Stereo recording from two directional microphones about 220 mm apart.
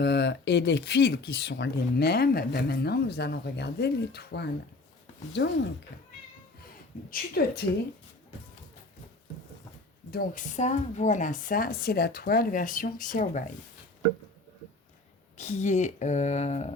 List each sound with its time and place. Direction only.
0.0 s speech: 50° left (ahead or behind)
7.1 s speech: 45° left (ahead or behind)
10.1 s speech: 40° left (ahead or behind)
15.4 s speech: 30° left (ahead or behind)